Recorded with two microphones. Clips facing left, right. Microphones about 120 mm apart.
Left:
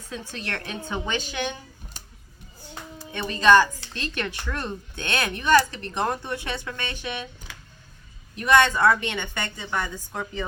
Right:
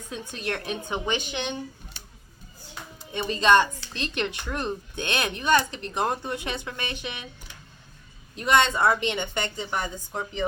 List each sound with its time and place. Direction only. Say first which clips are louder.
0.1 s speech: right 2 dB; 15° right (ahead or behind)
3.2 s speech: left 2 dB; 25° right (ahead or behind)
7.5 s a sound: left 4 dB; 90° left
8.4 s speech: left 2 dB; 25° right (ahead or behind)